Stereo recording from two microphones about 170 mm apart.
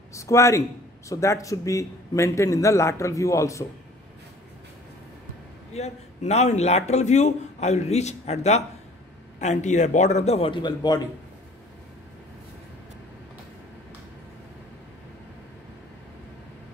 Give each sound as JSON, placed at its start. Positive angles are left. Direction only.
{"t": 0.1, "sound": "a man's voice", "side_deg": 15}
{"t": 5.7, "sound": "a man's voice", "side_deg": 40}